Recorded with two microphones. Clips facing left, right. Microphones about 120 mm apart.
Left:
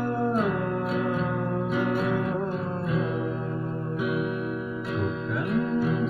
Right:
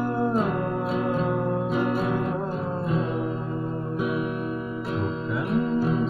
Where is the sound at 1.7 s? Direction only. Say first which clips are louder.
Left 1 dB; 30° right (ahead or behind).